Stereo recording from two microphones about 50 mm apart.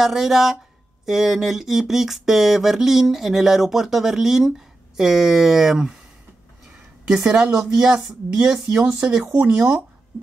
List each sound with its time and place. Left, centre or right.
0.0 s speech: centre
7.1 s speech: centre